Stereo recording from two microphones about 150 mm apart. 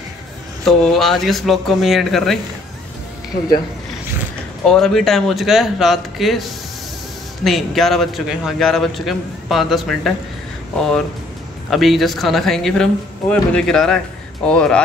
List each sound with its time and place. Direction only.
0.7 s a man's voice: centre (ahead or behind)
4.6 s a man's voice: 5° left (ahead or behind)
11.7 s a man's voice: centre (ahead or behind)